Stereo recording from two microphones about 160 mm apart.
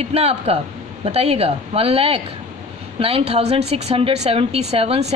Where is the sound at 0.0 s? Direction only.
40° right (ahead or behind).